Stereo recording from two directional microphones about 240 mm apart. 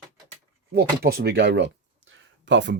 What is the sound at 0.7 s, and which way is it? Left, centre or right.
Speech, right.